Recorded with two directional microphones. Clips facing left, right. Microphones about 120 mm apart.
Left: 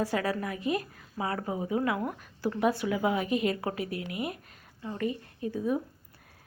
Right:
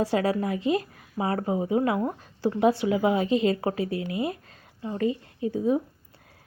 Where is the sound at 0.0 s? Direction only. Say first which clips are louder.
Right 5 dB; 25° right (ahead or behind).